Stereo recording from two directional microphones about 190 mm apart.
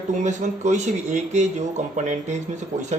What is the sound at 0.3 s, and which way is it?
Speech, 40° right (ahead or behind).